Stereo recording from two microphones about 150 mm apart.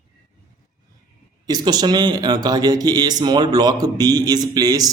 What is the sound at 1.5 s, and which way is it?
Speech, 25° right (ahead or behind).